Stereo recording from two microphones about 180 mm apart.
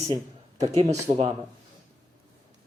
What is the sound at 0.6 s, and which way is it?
Speech, 35° right (ahead or behind).